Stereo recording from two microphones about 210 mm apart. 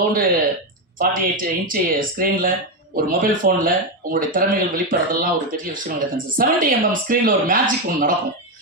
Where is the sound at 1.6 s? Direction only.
40° right (ahead or behind).